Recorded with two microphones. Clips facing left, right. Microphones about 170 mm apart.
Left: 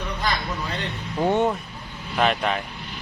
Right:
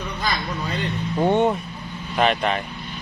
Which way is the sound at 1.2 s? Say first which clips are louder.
Right 2 dB; centre (ahead or behind).